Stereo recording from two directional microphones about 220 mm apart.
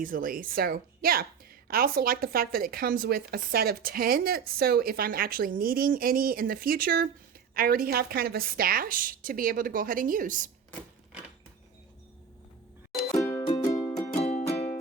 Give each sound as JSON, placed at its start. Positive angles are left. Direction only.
{"t": 0.0, "sound": "a woman's voice", "side_deg": -40}
{"t": 13.1, "sound": "music", "side_deg": 10}
{"t": 14.1, "sound": "music", "side_deg": 30}